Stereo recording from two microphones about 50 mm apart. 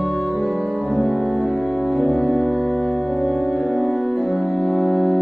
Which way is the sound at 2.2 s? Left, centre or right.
Centre.